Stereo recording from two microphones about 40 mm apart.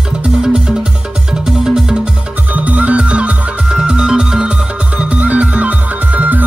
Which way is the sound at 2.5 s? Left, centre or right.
Right.